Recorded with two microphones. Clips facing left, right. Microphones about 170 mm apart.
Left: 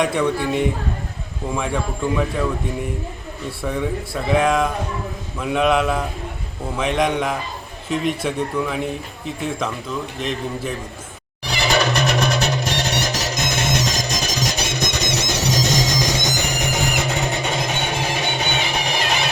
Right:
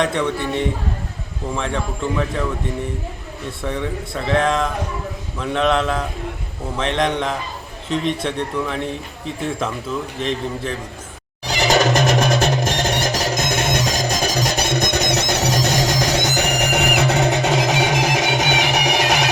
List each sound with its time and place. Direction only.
0.0 s speech: 5° left (ahead or behind)
3.6 s a man's voice: 5° left (ahead or behind)
11.4 s music: 40° right (ahead or behind); by 19.3 s 75° right (ahead or behind)